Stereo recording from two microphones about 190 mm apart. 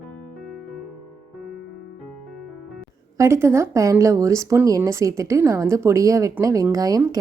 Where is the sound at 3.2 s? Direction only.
15° right (ahead or behind).